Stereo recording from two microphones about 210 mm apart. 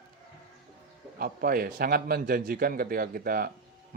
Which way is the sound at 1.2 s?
45° right (ahead or behind).